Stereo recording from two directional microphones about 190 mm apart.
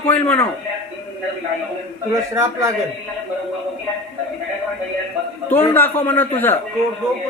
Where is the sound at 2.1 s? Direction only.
15° right (ahead or behind).